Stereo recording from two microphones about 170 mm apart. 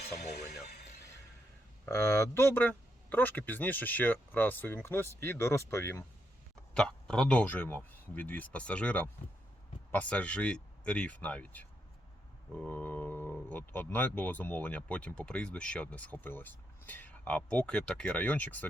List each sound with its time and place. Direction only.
0.0 s speech: 70° left (ahead or behind)
1.8 s speech: 15° left (ahead or behind)
6.7 s speech: 5° left (ahead or behind)